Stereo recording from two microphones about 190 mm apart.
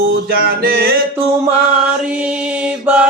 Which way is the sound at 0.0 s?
50° right (ahead or behind).